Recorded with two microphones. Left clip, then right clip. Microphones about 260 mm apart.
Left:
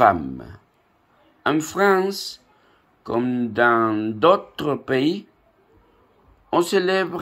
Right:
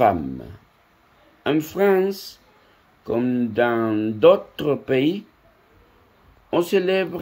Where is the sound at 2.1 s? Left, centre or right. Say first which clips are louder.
Left 3 dB; centre.